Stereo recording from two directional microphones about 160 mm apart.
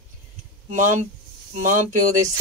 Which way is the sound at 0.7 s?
50° right (ahead or behind).